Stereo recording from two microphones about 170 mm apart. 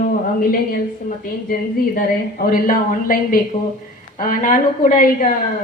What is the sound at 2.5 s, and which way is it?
A woman's voice, 55° left (ahead or behind).